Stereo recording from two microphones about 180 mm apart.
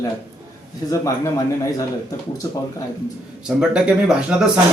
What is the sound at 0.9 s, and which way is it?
Speech, 20° left (ahead or behind).